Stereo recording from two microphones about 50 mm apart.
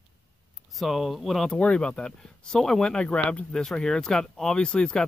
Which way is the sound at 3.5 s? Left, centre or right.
Centre.